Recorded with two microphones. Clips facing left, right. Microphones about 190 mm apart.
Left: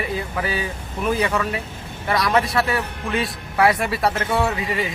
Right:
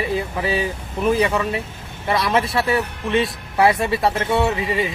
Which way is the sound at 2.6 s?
25° right (ahead or behind).